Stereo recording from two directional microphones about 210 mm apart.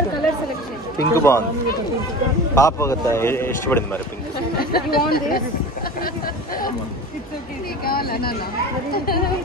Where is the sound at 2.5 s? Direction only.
15° left (ahead or behind).